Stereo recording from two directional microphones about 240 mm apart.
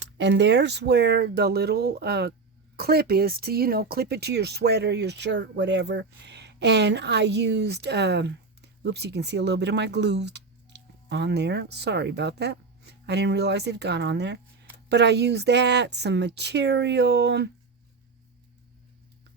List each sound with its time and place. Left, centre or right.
0.0 s speech: right